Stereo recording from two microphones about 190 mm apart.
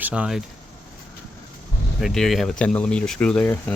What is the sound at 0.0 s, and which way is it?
Speech, 5° right (ahead or behind).